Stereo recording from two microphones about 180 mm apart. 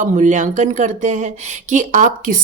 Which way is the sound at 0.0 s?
45° right (ahead or behind).